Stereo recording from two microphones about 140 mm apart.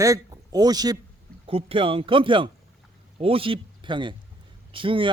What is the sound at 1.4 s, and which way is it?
A man's voice, 40° right (ahead or behind).